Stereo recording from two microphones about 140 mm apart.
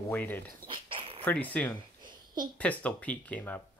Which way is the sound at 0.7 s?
40° right (ahead or behind).